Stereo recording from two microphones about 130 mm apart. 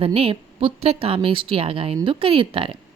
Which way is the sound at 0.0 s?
45° right (ahead or behind).